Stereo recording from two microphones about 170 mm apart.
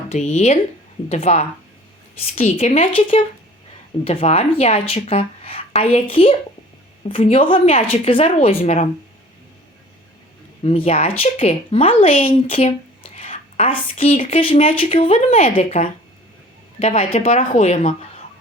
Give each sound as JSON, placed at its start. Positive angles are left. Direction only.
{"t": 0.1, "sound": "a woman's voice", "side_deg": 40}
{"t": 10.6, "sound": "a woman's voice", "side_deg": 35}
{"t": 13.1, "sound": "a sound", "side_deg": 35}
{"t": 14.3, "sound": "a woman's voice", "side_deg": 35}
{"t": 17.0, "sound": "a woman's voice", "side_deg": 35}